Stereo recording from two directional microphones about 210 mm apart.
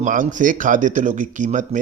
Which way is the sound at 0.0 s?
40° right (ahead or behind).